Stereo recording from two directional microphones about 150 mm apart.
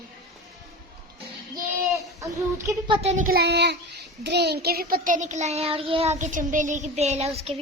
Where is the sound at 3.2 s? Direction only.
90° right; by 7.6 s 40° right (ahead or behind).